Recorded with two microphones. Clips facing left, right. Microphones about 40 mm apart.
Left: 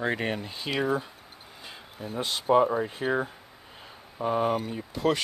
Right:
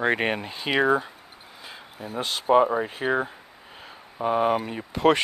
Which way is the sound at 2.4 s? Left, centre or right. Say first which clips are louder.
Right 3 dB; right.